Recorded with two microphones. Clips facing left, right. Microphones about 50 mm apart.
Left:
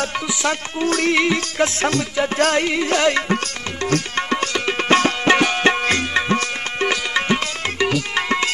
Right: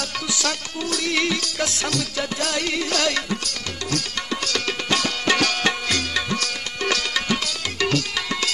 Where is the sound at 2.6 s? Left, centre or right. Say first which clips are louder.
Left 5 dB; left.